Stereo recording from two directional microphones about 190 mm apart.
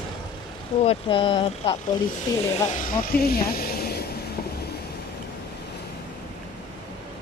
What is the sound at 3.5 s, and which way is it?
Vehicle, 50° left (ahead or behind).